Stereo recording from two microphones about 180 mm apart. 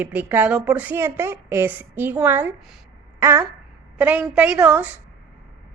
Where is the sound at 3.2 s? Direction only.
15° right (ahead or behind).